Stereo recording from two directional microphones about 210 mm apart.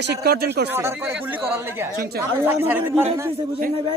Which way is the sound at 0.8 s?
10° right (ahead or behind).